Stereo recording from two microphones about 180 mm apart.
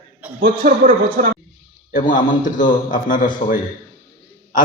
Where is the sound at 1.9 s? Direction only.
45° left (ahead or behind).